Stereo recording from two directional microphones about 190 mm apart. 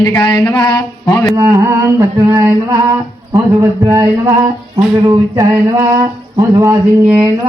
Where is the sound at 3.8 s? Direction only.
20° right (ahead or behind).